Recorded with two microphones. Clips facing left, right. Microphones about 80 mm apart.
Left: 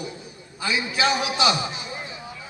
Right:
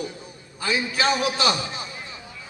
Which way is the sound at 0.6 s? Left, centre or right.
Right.